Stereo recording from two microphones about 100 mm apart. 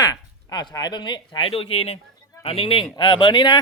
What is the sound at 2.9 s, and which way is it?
Speech, 50° left (ahead or behind).